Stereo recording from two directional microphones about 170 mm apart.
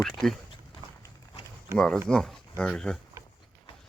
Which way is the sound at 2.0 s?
5° left (ahead or behind).